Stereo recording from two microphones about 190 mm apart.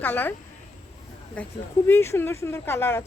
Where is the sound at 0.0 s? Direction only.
10° left (ahead or behind).